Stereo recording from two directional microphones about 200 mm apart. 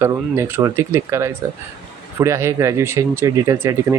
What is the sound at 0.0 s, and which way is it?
Speech, 15° right (ahead or behind).